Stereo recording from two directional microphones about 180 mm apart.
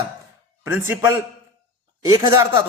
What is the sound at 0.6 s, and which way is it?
Speech, 15° right (ahead or behind).